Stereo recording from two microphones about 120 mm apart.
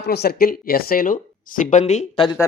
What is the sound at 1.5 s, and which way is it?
Speech, 90° left.